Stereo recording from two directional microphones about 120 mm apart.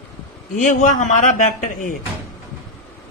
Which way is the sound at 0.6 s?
90° left.